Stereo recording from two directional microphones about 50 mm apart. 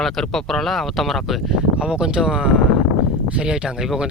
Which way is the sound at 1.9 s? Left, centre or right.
Centre.